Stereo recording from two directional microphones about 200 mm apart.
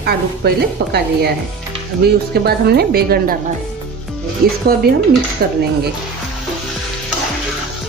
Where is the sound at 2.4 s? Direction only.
50° right (ahead or behind).